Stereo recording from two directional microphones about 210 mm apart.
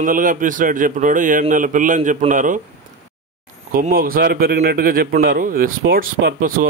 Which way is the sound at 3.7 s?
45° right (ahead or behind).